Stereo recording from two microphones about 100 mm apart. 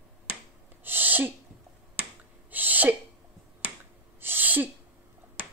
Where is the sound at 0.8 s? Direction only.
20° right (ahead or behind).